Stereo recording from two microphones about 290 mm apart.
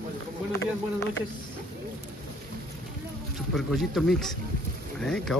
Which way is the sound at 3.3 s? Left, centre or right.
Centre.